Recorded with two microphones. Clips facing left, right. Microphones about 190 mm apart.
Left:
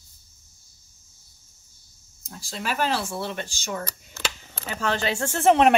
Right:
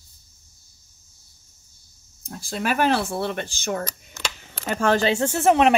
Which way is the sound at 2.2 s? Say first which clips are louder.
Right 5 dB; 55° right (ahead or behind).